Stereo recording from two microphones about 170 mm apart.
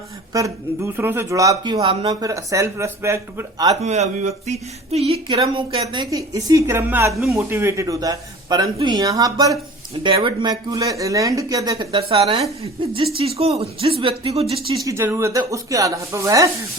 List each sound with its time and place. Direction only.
0.3 s speech: 20° right (ahead or behind)
3.8 s speech: 40° right (ahead or behind); by 7.1 s 15° right (ahead or behind)
7.1 s speech: centre (ahead or behind)
7.3 s speech: 15° right (ahead or behind); by 14.4 s 35° right (ahead or behind)
14.8 s speech: 15° right (ahead or behind)